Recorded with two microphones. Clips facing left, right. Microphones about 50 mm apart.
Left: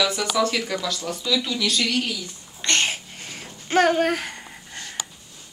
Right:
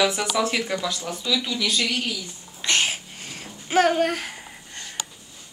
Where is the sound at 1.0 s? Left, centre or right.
Centre.